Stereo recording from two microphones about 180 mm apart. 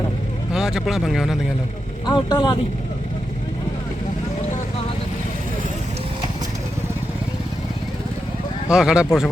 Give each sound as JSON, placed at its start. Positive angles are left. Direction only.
{"t": 0.5, "sound": "speech", "side_deg": 0}
{"t": 2.0, "sound": "speech", "side_deg": 25}
{"t": 8.7, "sound": "speech", "side_deg": -5}